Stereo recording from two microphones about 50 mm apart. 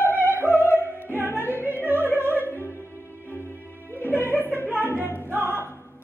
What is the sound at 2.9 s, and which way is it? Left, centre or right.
Music, right.